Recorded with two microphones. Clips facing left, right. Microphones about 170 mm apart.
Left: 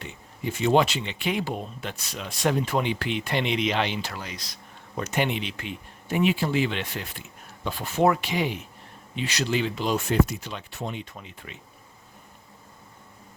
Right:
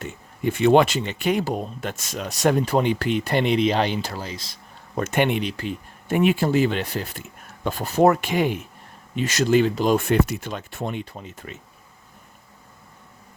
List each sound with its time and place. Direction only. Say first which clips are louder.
0.0 s speech: right 7 dB; 50° right (ahead or behind); by 4.4 s 30° right (ahead or behind)
4.9 s speech: right 5 dB; 55° right (ahead or behind)
10.5 s speech: right 5 dB; 50° right (ahead or behind)
11.0 s speech: right 5 dB; 40° right (ahead or behind)